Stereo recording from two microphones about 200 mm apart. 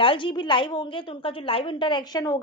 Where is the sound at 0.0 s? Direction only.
25° left (ahead or behind).